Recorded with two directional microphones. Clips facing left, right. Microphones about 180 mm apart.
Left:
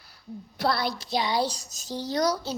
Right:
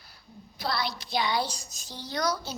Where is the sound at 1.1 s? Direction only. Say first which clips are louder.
Left 2 dB; 35° left (ahead or behind).